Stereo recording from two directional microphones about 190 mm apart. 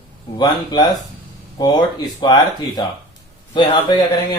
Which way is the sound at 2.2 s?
20° left (ahead or behind).